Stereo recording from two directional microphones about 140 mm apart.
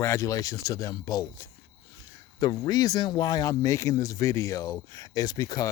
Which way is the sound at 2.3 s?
25° left (ahead or behind).